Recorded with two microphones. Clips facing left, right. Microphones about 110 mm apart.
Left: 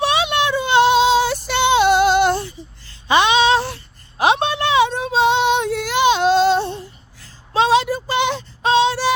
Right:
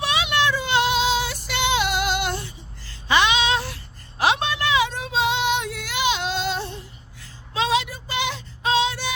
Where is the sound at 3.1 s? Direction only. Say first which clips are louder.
Left 4 dB; 20° left (ahead or behind).